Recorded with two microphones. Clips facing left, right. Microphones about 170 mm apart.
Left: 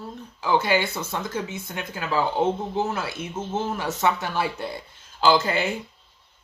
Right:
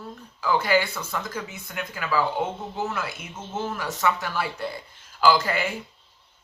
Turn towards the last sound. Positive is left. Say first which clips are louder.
# left 1 dB
turn(degrees=25)  # may be behind; listen again after turning